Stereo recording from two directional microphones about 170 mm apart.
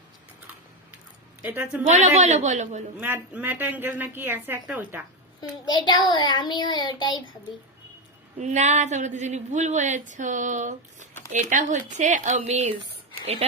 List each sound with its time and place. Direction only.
1.4 s speech: 10° right (ahead or behind)
1.8 s speech: 45° right (ahead or behind)
3.0 s a woman's voice: 10° right (ahead or behind)
5.4 s a child's voice: 25° left (ahead or behind)
8.4 s speech: 45° right (ahead or behind)